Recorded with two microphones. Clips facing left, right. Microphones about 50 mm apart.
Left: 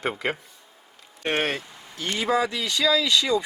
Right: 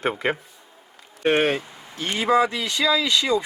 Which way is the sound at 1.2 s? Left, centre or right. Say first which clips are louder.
Right 5 dB; centre.